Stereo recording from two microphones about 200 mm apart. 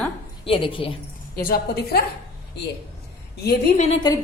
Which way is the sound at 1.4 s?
50° left (ahead or behind).